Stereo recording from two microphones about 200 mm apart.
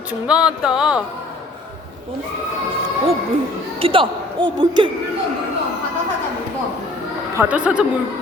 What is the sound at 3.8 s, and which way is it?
Speech, 25° right (ahead or behind).